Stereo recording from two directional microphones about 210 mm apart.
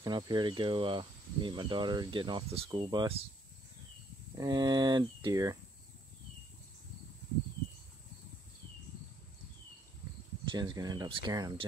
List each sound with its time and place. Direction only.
0.0 s speech: 20° right (ahead or behind)
4.4 s speech: 20° right (ahead or behind)
10.4 s speech: 20° right (ahead or behind)